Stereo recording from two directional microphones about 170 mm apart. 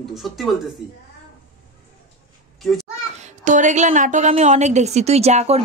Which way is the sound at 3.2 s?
45° right (ahead or behind).